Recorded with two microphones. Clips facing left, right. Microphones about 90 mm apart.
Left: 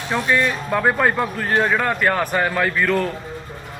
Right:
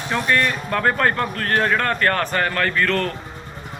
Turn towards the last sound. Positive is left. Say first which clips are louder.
# left 1 dB
turn(degrees=10)  # may be behind; listen again after turning